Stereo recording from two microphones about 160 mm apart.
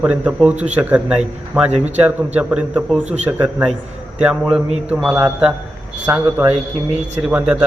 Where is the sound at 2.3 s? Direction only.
5° right (ahead or behind).